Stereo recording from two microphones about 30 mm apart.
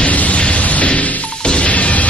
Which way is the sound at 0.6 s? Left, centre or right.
Left.